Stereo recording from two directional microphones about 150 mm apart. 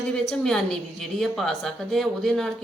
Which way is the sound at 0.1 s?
5° left (ahead or behind).